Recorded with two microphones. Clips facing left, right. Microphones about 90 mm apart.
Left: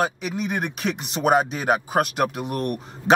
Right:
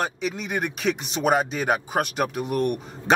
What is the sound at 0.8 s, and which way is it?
Speech, 35° left (ahead or behind).